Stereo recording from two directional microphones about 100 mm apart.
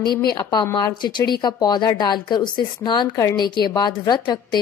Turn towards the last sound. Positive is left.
turn(degrees=45)  # may be behind; listen again after turning